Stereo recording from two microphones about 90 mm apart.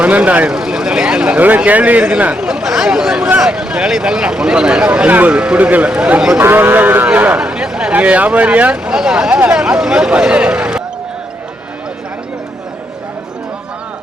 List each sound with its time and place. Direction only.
0.0 s speech: 15° right (ahead or behind)
6.4 s speech: 25° right (ahead or behind)